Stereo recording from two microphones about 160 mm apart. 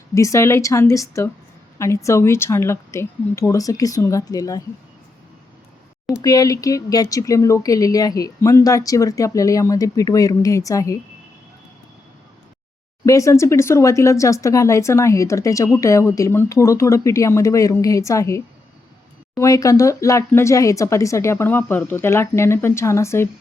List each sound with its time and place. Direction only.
0.1 s speech: 20° left (ahead or behind)
6.2 s speech: 20° left (ahead or behind)
13.1 s speech: 20° left (ahead or behind)